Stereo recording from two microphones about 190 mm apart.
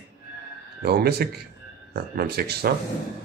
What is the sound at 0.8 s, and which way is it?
Speech, 55° right (ahead or behind).